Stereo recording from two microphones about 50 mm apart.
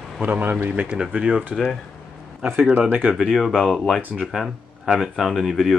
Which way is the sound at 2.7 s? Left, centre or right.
Right.